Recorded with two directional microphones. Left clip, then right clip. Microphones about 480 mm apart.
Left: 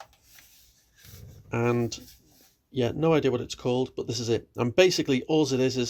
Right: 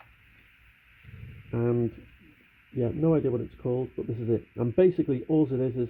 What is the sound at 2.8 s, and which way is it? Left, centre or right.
Speech, centre.